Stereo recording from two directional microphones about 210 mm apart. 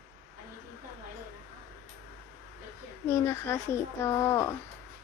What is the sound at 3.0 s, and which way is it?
Speech, 15° left (ahead or behind).